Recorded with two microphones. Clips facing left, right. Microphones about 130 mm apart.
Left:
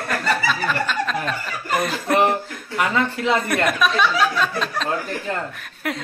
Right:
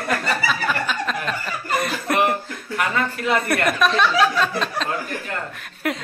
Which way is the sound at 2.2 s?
20° left (ahead or behind).